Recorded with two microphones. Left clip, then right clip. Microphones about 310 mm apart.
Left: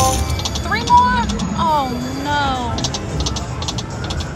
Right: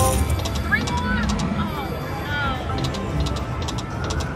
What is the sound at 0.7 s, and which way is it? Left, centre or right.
Vehicle, centre.